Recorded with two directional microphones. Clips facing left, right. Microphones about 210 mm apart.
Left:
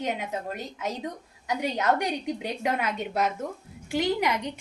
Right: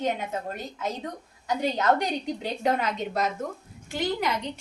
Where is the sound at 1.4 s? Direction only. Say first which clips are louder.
Right 2 dB; 10° left (ahead or behind).